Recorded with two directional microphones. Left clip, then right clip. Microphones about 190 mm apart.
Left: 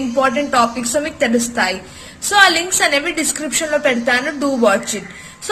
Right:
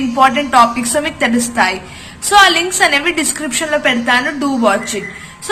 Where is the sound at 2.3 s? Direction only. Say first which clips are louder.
Right 3 dB; 30° left (ahead or behind).